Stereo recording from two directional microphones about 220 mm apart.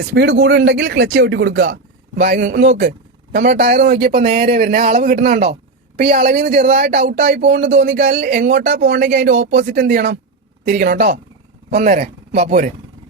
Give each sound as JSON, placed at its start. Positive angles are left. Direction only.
{"t": 0.0, "sound": "speech", "side_deg": -50}
{"t": 2.1, "sound": "speech", "side_deg": -35}